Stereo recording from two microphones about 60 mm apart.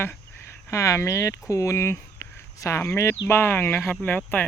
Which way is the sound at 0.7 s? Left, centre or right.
Left.